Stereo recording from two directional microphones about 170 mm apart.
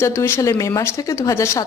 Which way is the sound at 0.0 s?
15° left (ahead or behind).